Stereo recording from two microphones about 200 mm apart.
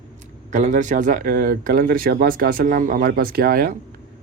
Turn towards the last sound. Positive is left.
turn(degrees=-50)  # may be behind; listen again after turning